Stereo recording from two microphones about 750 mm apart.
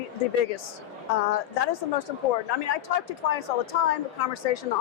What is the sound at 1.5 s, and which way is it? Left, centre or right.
A woman's voice, left.